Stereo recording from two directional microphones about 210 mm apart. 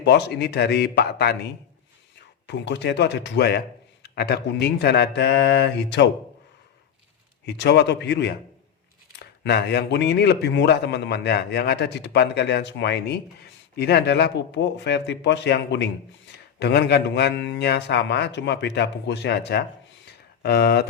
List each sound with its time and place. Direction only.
0.0 s a man's voice: 55° left (ahead or behind)
7.4 s a man's voice: 55° left (ahead or behind)